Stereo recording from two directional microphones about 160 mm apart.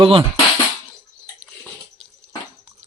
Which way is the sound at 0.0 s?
35° right (ahead or behind).